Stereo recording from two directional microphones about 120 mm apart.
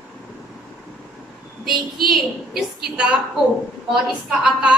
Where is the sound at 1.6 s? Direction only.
Centre (ahead or behind).